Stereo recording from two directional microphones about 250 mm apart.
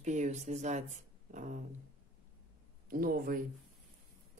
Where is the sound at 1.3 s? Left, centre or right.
Right.